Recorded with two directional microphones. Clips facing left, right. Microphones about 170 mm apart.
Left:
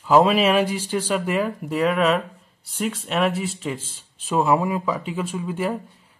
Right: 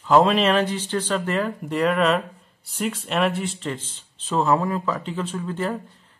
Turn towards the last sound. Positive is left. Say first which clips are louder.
# left 1 dB
turn(degrees=10)  # may be behind; listen again after turning